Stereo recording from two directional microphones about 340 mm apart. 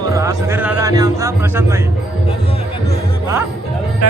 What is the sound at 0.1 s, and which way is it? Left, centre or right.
A man's voice, centre.